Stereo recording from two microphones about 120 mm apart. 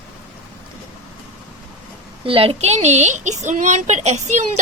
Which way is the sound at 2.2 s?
50° right (ahead or behind).